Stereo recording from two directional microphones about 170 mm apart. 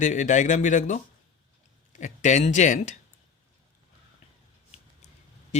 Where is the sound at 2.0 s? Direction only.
45° left (ahead or behind).